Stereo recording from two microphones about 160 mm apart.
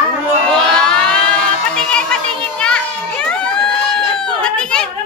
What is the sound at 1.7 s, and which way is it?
Children playing, 5° left (ahead or behind).